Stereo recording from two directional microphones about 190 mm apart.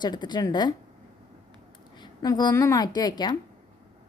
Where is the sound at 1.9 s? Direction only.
20° left (ahead or behind).